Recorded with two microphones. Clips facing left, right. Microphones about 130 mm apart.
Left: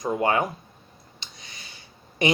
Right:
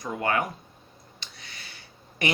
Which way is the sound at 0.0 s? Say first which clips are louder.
Left 4 dB; 25° left (ahead or behind).